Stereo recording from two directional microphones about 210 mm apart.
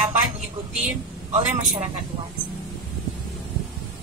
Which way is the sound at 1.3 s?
35° right (ahead or behind).